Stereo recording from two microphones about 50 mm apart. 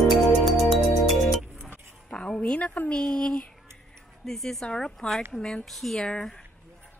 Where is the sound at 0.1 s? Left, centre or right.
Centre.